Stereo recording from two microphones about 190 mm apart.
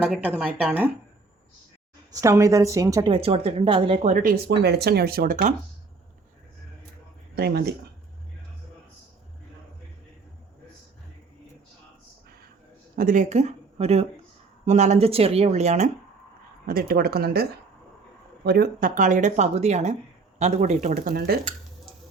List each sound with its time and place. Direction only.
0.4 s speech: 10° right (ahead or behind)
2.1 s a woman's voice: 15° right (ahead or behind)
4.1 s speech: 45° right (ahead or behind)
7.3 s speech: 60° right (ahead or behind)
13.0 s speech: 45° right (ahead or behind)
16.6 s speech: 55° right (ahead or behind)
18.4 s speech: 55° right (ahead or behind)